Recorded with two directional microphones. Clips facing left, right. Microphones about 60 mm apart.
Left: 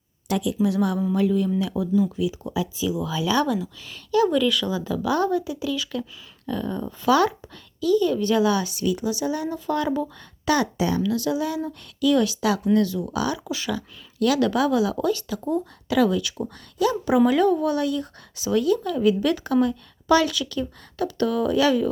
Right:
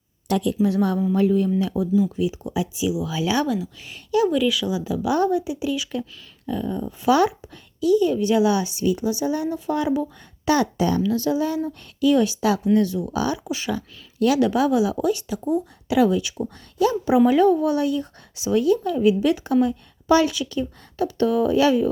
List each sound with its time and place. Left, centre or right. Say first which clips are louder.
0.3 s speech: right 2 dB; right
0.6 s a woman's voice: even; right; by 3.7 s centre
3.8 s speech: even; right
10.4 s a woman's voice: right 2 dB; right